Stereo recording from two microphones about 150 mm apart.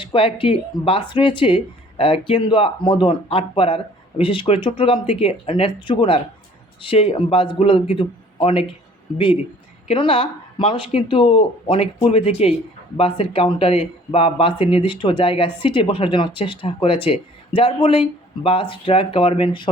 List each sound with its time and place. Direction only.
0.0 s speech: 35° left (ahead or behind)